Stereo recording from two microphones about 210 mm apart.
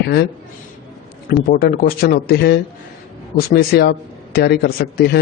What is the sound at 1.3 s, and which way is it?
A man's voice, 45° left (ahead or behind).